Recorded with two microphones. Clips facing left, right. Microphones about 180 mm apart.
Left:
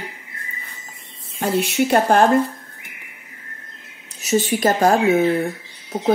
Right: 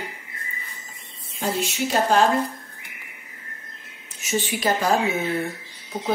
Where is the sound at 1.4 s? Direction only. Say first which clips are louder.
Left 6 dB; 60° left (ahead or behind).